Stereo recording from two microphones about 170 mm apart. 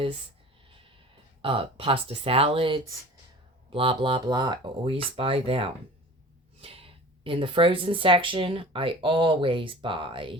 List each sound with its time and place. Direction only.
1.4 s speech: 30° right (ahead or behind)
6.6 s snort: 35° right (ahead or behind)
7.3 s speech: 30° right (ahead or behind)